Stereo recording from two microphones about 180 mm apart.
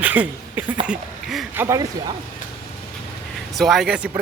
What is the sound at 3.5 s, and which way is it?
Speech, centre (ahead or behind).